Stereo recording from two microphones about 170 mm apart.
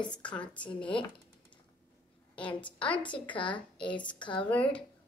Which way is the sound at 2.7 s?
5° left (ahead or behind).